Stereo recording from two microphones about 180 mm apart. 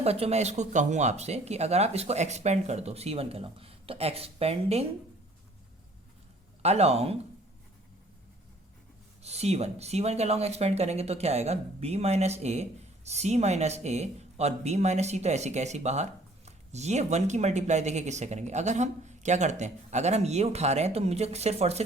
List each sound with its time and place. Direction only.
0.0 s speech: 35° right (ahead or behind)
6.6 s speech: 35° right (ahead or behind)
9.2 s speech: 35° right (ahead or behind)